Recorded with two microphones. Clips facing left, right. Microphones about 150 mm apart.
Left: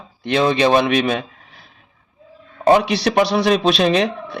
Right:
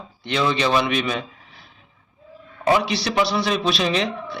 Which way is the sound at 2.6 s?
55° left (ahead or behind).